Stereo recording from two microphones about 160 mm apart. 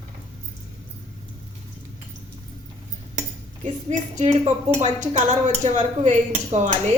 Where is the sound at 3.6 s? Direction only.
45° right (ahead or behind).